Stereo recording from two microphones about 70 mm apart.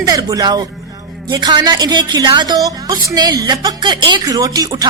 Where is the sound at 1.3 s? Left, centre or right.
Right.